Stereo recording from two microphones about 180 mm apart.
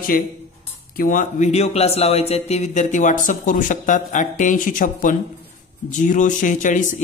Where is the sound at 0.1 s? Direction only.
50° left (ahead or behind).